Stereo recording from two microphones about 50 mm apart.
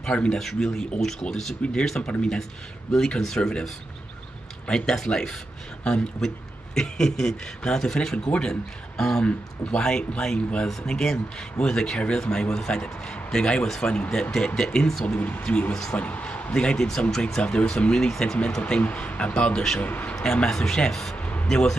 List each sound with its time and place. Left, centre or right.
0.0 s a man's voice: centre
1.6 s a man's voice: centre
15.1 s speech: left
15.7 s a man's voice: centre
16.0 s a man's voice: left
16.5 s a man's voice: centre
17.4 s a man's voice: left
18.1 s speech: centre
18.8 s speech: left
19.8 s speech: left
20.4 s a man's voice: centre
21.2 s a sound: left
21.5 s a man's voice: centre